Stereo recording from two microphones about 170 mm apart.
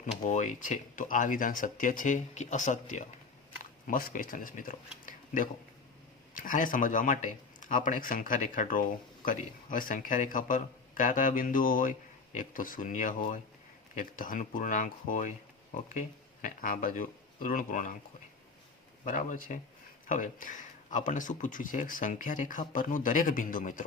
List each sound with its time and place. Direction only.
0.0 s a man's voice: 45° left (ahead or behind)
19.0 s a man's voice: 50° left (ahead or behind)